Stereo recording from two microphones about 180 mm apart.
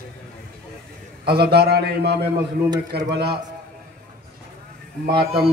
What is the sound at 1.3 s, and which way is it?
Speech, 60° right (ahead or behind).